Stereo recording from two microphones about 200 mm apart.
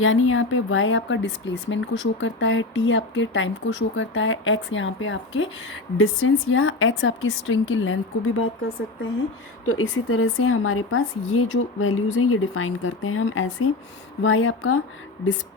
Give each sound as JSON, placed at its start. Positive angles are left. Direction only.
{"t": 0.0, "sound": "speech", "side_deg": 90}
{"t": 9.6, "sound": "a woman's voice", "side_deg": 80}
{"t": 14.2, "sound": "speech", "side_deg": 75}